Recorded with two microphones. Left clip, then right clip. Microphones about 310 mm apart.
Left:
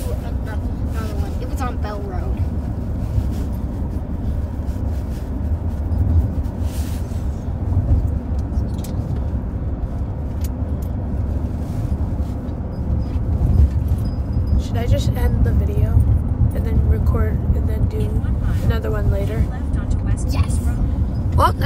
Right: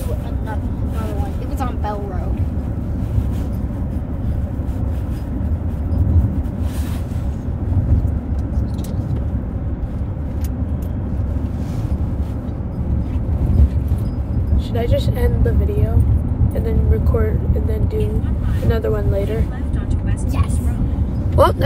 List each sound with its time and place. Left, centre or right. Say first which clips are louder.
14.7 s vehicle: right 5 dB; centre
21.4 s vehicle: right 3 dB; centre